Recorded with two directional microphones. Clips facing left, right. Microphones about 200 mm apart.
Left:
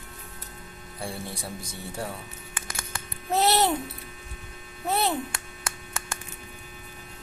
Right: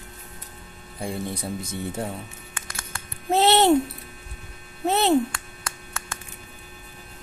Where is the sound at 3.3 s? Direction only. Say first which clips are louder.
Right 5 dB; 25° right (ahead or behind).